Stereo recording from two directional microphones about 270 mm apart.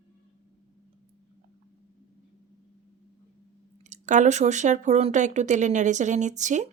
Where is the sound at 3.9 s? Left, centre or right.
Right.